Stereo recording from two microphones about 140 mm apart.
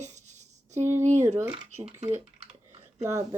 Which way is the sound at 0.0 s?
55° right (ahead or behind).